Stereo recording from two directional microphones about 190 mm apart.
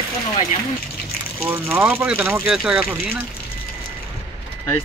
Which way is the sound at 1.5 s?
10° right (ahead or behind).